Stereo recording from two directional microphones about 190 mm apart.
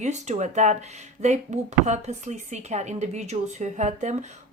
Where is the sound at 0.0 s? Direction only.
40° right (ahead or behind).